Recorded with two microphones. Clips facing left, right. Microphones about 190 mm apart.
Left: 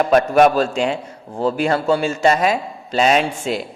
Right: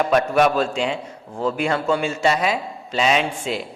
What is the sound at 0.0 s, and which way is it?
A woman's voice, 40° left (ahead or behind).